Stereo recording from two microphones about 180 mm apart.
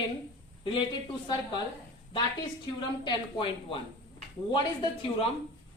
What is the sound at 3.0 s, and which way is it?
Speech, 25° left (ahead or behind).